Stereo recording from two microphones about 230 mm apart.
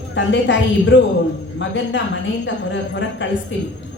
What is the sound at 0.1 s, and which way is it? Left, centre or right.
A man's voice, left.